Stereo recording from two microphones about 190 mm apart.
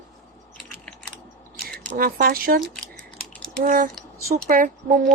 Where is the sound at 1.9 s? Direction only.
45° right (ahead or behind).